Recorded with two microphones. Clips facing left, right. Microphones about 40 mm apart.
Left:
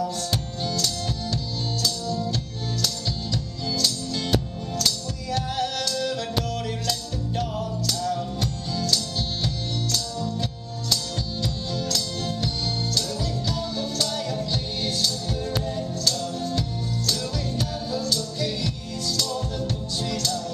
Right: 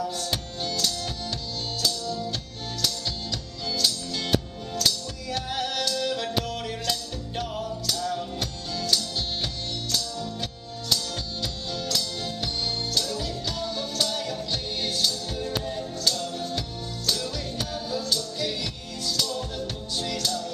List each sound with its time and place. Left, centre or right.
0.0 s music: centre
1.8 s music: centre
3.7 s music: centre
11.4 s music: centre